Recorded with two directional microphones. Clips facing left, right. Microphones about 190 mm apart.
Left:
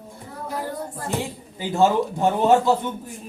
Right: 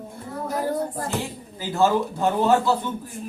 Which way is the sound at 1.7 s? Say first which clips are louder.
Left 1 dB; 15° left (ahead or behind).